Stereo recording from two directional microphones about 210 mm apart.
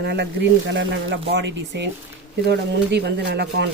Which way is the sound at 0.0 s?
50° right (ahead or behind).